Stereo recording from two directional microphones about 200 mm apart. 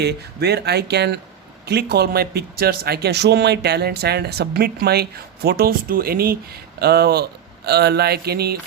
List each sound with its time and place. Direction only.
0.0 s speech: 55° right (ahead or behind)